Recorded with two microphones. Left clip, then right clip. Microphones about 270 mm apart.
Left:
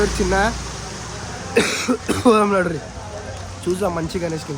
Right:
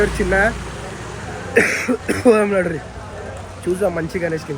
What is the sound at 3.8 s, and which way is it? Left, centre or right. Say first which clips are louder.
Speech: right 4 dB; centre.